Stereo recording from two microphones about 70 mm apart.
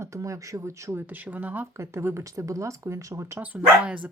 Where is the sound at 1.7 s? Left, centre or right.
Right.